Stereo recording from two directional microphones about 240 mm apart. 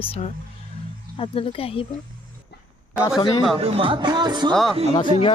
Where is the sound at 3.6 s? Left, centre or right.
Right.